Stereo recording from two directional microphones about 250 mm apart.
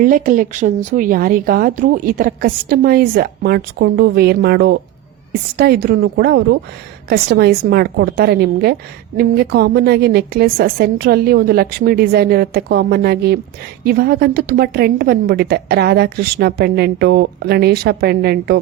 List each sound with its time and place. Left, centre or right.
0.0 s a woman's voice: right